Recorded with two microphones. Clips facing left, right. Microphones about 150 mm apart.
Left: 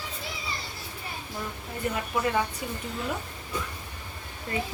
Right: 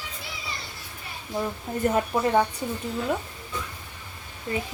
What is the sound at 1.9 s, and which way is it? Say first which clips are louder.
Speech: right 5 dB; 45° right (ahead or behind).